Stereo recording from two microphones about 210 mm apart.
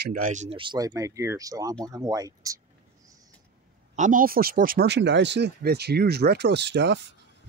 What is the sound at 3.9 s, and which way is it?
Speech, 40° right (ahead or behind).